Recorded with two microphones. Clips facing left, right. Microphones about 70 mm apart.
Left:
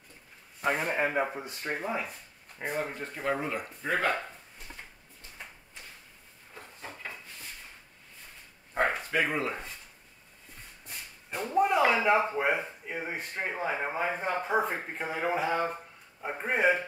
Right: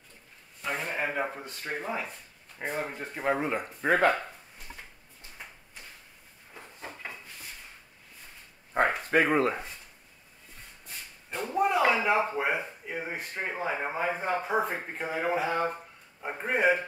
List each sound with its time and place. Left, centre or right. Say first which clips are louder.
0.8 s speech: left 2 dB; centre
3.1 s speech: right 6 dB; centre
3.8 s speech: right 6 dB; right
5.4 s a sound: even; centre
6.5 s train: right 1 dB; centre
9.1 s speech: right 5 dB; right
10.9 s a sound: even; centre
12.3 s speech: left 1 dB; centre